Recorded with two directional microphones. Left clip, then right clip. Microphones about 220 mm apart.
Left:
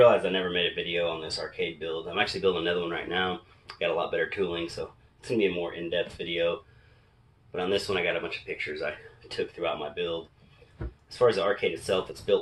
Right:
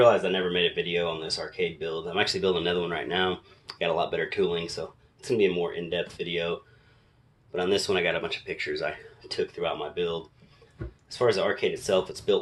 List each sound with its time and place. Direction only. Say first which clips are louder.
0.0 s a man's voice: even; 50° right (ahead or behind)
7.5 s a man's voice: right 2 dB; 50° right (ahead or behind)
11.2 s a man's voice: left 1 dB; 50° right (ahead or behind)